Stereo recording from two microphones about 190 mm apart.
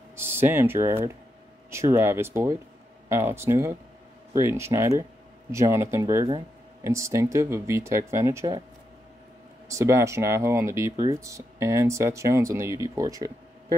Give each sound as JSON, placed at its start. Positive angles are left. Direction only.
{"t": 0.1, "sound": "speech", "side_deg": -10}
{"t": 9.7, "sound": "speech", "side_deg": -15}